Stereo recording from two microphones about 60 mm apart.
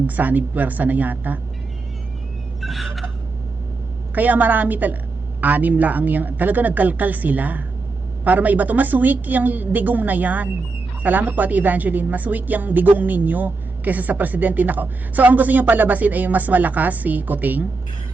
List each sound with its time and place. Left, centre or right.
0.2 s a woman's voice: right
2.6 s a sound: centre
4.1 s a woman's voice: right